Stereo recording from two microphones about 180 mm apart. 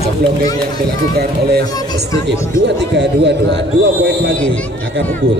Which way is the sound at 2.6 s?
75° right (ahead or behind).